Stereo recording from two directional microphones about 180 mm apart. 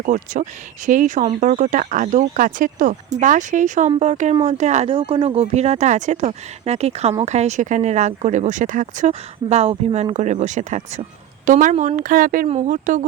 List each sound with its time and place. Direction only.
0.0 s speech: 45° right (ahead or behind)